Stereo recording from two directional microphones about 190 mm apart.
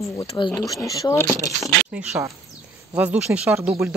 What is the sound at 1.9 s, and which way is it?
Speech, 5° right (ahead or behind).